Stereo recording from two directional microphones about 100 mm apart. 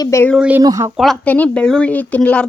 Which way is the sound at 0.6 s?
35° right (ahead or behind).